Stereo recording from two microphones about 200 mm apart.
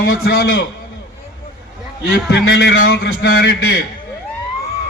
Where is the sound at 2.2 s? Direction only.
60° left (ahead or behind).